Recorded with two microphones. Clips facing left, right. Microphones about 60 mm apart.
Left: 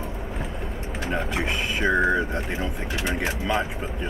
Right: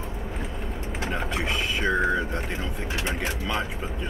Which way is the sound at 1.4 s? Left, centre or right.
Left.